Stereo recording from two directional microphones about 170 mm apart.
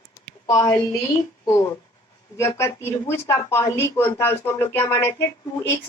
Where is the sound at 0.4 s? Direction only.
20° left (ahead or behind).